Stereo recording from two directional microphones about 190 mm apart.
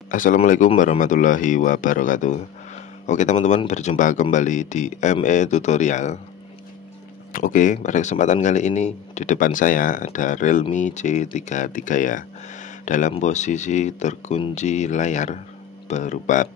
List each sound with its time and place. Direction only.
0.1 s speech: 45° left (ahead or behind)
7.3 s speech: 45° left (ahead or behind)